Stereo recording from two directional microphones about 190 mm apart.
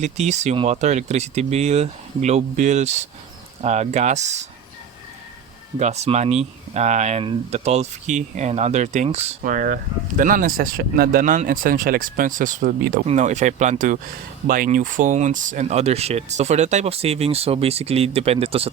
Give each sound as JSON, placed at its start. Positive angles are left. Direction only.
{"t": 0.0, "sound": "speech", "side_deg": -35}
{"t": 5.8, "sound": "speech", "side_deg": -35}
{"t": 13.1, "sound": "speech", "side_deg": -35}